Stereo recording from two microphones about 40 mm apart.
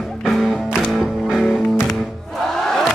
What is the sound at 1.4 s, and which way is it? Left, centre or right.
Music, centre.